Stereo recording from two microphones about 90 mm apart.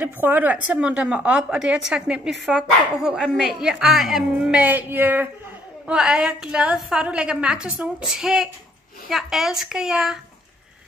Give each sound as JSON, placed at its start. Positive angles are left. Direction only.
{"t": 0.0, "sound": "a woman's voice", "side_deg": -20}
{"t": 4.5, "sound": "music", "side_deg": -20}
{"t": 5.9, "sound": "a woman's voice", "side_deg": -10}